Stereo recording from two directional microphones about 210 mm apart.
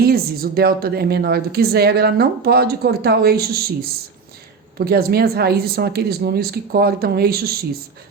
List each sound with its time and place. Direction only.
0.0 s a woman's voice: 45° right (ahead or behind)
4.9 s a woman's voice: 50° right (ahead or behind)